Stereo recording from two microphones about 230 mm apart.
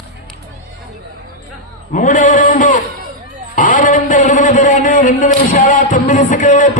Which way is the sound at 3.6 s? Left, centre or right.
Left.